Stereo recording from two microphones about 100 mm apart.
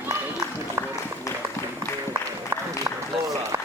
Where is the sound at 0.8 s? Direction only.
35° right (ahead or behind).